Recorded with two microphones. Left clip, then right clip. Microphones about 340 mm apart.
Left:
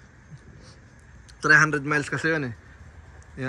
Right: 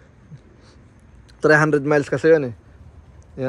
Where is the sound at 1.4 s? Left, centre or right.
Centre.